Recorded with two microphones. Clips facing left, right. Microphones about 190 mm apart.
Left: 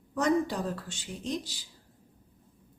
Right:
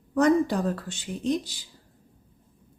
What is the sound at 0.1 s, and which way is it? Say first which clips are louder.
Speech: right 6 dB; 60° right (ahead or behind).